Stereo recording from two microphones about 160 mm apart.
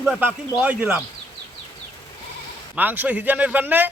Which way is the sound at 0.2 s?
10° right (ahead or behind).